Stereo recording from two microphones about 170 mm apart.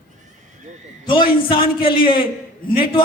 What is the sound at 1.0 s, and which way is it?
A man's voice, 30° left (ahead or behind).